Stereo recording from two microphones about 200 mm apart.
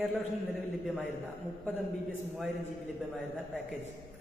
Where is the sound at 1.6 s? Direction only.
10° left (ahead or behind).